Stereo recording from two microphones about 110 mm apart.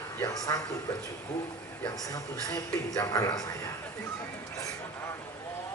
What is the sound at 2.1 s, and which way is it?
Speech, 35° left (ahead or behind).